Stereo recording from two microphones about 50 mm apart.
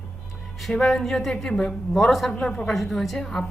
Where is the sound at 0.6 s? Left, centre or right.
Centre.